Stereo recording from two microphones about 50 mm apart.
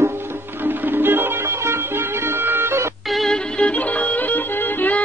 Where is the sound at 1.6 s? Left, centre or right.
Right.